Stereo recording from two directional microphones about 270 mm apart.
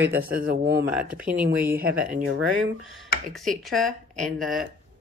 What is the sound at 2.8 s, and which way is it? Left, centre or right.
Speech, centre.